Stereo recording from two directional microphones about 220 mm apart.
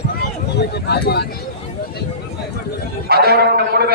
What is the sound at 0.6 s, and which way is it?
Speech, 45° left (ahead or behind).